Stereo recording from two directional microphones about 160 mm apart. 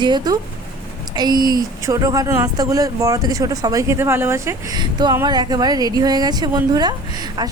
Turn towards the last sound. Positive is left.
turn(degrees=-25)  # may be behind; listen again after turning